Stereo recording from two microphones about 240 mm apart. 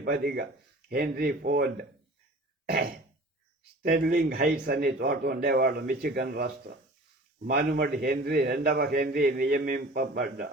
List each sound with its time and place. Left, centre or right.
0.0 s a man's voice: right
2.6 s throat clearing: right
3.9 s a man's voice: right